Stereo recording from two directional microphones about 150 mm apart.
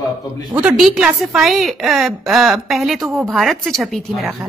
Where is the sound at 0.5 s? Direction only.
10° right (ahead or behind).